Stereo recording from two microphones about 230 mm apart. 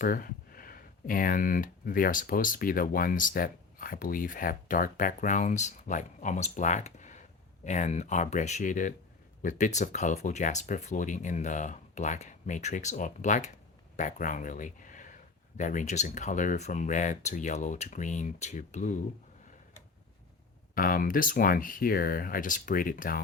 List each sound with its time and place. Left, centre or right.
0.0 s speech: left
20.7 s speech: left